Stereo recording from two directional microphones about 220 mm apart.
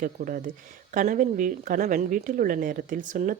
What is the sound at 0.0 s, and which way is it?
A woman's voice, 40° right (ahead or behind).